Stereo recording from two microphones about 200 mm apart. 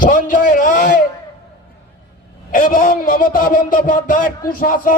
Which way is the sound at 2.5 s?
40° left (ahead or behind).